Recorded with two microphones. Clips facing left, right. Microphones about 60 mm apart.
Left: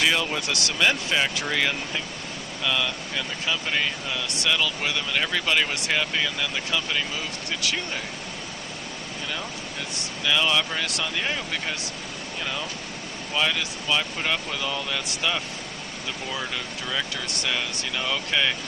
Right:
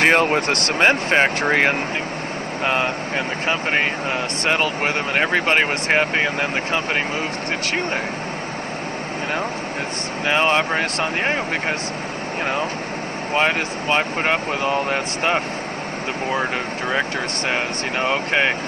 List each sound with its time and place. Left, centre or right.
0.0 s speech: right
10.2 s speech: right
13.3 s speech: right
16.9 s speech: right